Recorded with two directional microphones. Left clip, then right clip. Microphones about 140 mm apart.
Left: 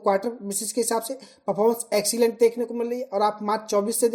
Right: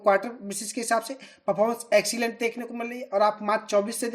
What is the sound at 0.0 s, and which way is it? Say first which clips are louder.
Speech: even; 45° left (ahead or behind).